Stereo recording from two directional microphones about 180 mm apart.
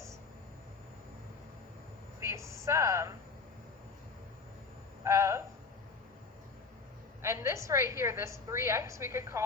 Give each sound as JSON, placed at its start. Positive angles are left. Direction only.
{"t": 2.2, "sound": "a woman's voice", "side_deg": -15}
{"t": 5.0, "sound": "a woman's voice", "side_deg": -15}
{"t": 7.2, "sound": "a woman's voice", "side_deg": -15}